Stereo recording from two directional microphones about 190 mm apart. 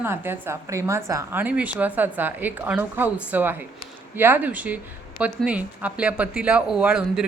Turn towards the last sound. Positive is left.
turn(degrees=-5)  # may be behind; listen again after turning